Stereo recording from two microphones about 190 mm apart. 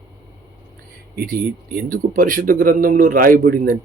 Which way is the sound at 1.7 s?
45° right (ahead or behind).